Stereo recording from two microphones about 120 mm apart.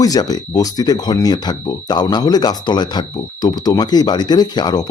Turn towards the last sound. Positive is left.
turn(degrees=35)  # may be behind; listen again after turning